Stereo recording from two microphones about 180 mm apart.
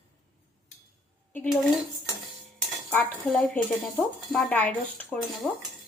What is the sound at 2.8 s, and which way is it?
Cutlery, 10° left (ahead or behind).